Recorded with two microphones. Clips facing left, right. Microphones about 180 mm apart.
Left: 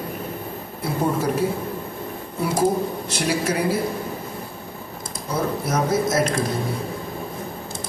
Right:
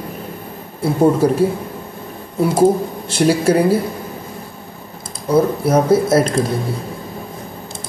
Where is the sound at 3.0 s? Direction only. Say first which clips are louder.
Right 13 dB; 30° right (ahead or behind).